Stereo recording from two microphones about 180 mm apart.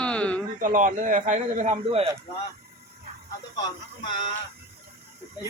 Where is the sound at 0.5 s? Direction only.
45° right (ahead or behind).